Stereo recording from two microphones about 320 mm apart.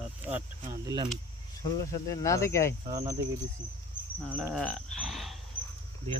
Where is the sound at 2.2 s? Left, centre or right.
Centre.